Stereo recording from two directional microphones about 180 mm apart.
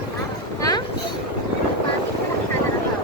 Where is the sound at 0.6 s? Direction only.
20° left (ahead or behind).